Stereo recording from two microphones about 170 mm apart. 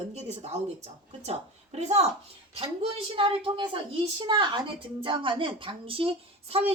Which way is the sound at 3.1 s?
30° right (ahead or behind).